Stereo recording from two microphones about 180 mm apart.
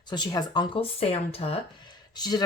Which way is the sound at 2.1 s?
20° left (ahead or behind).